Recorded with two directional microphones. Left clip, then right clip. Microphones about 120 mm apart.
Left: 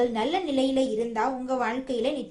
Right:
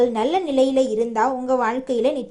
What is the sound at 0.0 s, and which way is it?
A woman's voice, 35° right (ahead or behind).